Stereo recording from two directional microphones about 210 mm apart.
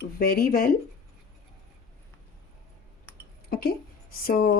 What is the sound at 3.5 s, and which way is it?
A woman's voice, 45° left (ahead or behind).